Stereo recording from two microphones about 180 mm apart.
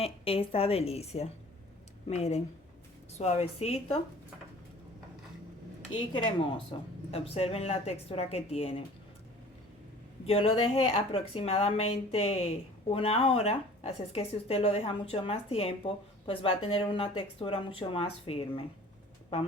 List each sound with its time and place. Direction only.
0.0 s a woman's voice: 30° left (ahead or behind)
6.1 s a woman's voice: 30° left (ahead or behind)
10.2 s a woman's voice: 30° left (ahead or behind)